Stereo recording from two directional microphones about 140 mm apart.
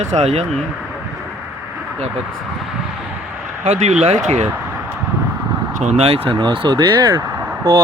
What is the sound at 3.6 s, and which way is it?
Speech, 50° right (ahead or behind).